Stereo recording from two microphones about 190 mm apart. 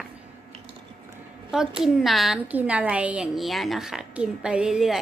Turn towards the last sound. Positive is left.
turn(degrees=-5)  # may be behind; listen again after turning